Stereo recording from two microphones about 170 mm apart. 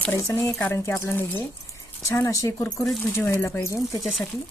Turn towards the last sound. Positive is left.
turn(degrees=0)  # may be behind; listen again after turning